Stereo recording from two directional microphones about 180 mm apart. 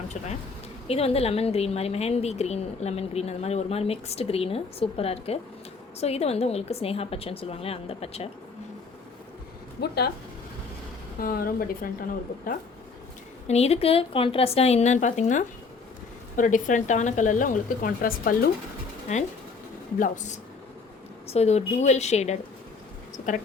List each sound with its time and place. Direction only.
0.9 s a woman's voice: 35° left (ahead or behind)
9.8 s speech: 65° left (ahead or behind)
11.2 s a woman's voice: 55° left (ahead or behind)
13.5 s a woman's voice: 35° left (ahead or behind); by 18.5 s 55° left (ahead or behind)
19.1 s a woman's voice: 40° left (ahead or behind)